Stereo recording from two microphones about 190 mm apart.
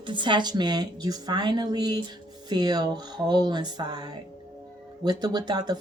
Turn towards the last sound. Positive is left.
turn(degrees=-20)  # may be behind; listen again after turning